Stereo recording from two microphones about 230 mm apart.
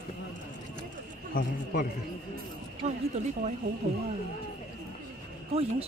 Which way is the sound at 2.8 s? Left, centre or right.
Right.